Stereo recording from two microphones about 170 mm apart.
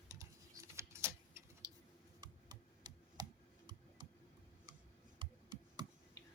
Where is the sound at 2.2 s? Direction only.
25° right (ahead or behind).